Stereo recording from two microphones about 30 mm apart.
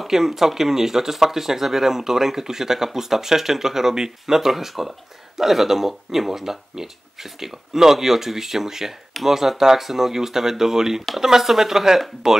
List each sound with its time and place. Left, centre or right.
0.0 s speech: centre